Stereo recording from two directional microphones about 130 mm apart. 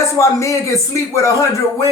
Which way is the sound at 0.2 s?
25° left (ahead or behind).